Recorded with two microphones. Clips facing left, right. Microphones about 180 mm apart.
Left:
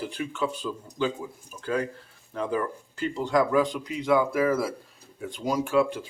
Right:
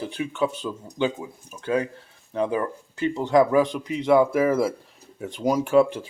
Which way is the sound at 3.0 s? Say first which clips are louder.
Right 5 dB; 20° right (ahead or behind).